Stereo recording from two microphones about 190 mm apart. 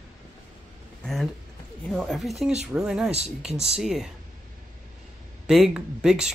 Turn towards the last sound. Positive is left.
turn(degrees=-5)  # may be behind; listen again after turning